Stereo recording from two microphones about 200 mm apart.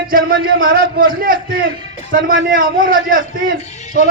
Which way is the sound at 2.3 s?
75° right (ahead or behind).